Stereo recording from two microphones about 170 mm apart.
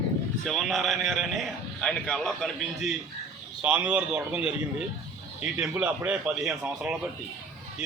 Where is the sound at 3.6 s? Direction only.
5° right (ahead or behind).